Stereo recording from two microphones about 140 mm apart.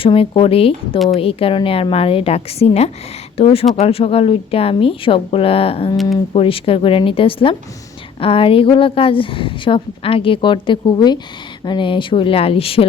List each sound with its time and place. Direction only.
0.0 s speech: 40° left (ahead or behind)